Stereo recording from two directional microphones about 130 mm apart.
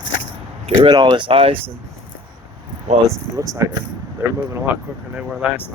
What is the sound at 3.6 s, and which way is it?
Speech, 25° right (ahead or behind).